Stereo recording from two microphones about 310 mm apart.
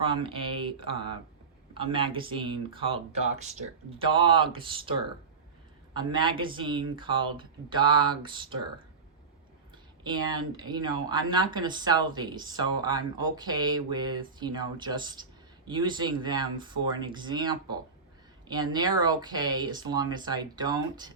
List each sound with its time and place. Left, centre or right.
0.0 s speech: centre
10.0 s speech: centre